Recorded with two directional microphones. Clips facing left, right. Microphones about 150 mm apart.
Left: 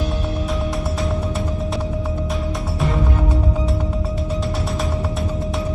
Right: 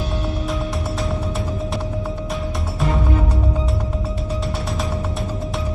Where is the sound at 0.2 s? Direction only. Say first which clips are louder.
Left 1 dB; centre (ahead or behind).